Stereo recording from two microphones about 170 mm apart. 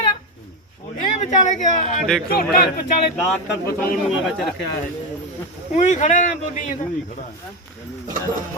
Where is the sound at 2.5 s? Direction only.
60° left (ahead or behind).